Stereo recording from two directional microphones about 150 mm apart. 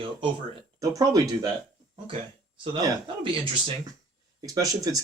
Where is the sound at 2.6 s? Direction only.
30° right (ahead or behind).